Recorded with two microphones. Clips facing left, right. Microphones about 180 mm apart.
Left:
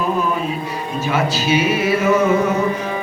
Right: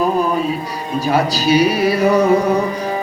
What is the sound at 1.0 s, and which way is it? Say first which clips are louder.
Music: right 3 dB; 35° right (ahead or behind).